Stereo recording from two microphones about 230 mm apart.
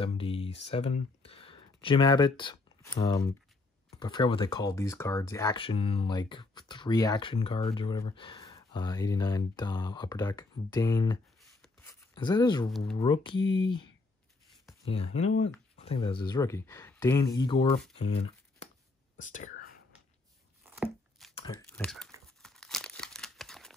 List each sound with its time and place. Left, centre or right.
0.0 s speech: left
11.6 s a sound: centre
12.2 s speech: centre
14.9 s speech: left
17.9 s crumpling: left
20.6 s a sound: centre
21.7 s speech: centre
22.4 s tearing: centre